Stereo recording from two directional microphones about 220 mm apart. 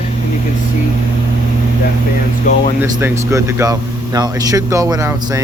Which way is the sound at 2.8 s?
10° right (ahead or behind).